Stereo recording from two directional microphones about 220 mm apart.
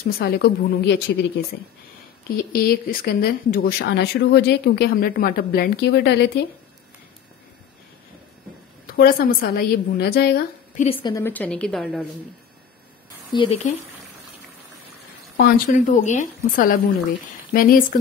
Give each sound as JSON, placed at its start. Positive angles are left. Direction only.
{"t": 0.0, "sound": "speech", "side_deg": 45}
{"t": 8.8, "sound": "a woman's voice", "side_deg": 40}
{"t": 10.8, "sound": "a woman's voice", "side_deg": 25}
{"t": 13.3, "sound": "speech", "side_deg": 25}
{"t": 15.3, "sound": "a woman's voice", "side_deg": 45}
{"t": 15.7, "sound": "a woman's voice", "side_deg": 35}